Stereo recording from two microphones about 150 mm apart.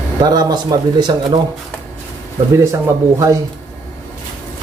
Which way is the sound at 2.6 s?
20° right (ahead or behind).